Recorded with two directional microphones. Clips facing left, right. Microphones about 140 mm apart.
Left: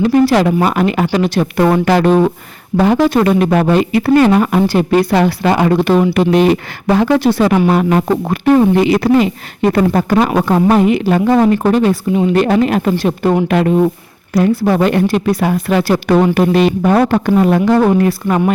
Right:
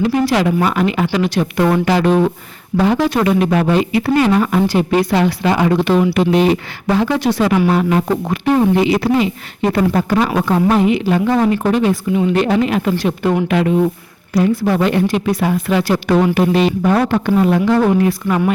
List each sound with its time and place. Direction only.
0.0 s speech: 45° left (ahead or behind)
12.3 s speech: 45° left (ahead or behind)
15.0 s speech: 35° left (ahead or behind)
15.5 s speech: 50° left (ahead or behind)